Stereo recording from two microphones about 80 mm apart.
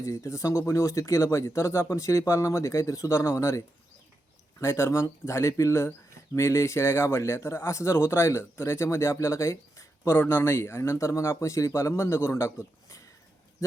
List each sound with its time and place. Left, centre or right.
0.0 s speech: left
4.6 s speech: left